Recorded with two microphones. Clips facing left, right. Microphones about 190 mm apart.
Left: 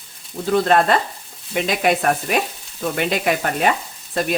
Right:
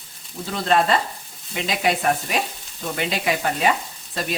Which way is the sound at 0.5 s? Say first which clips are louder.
Left 4 dB; 55° left (ahead or behind).